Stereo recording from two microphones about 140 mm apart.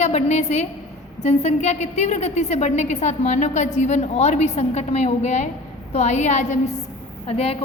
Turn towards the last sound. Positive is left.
turn(degrees=45)  # may be behind; listen again after turning